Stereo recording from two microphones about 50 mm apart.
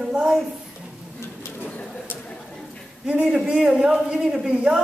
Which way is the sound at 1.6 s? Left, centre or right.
Left.